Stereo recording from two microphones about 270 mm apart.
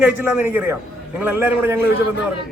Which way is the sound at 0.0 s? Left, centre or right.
Centre.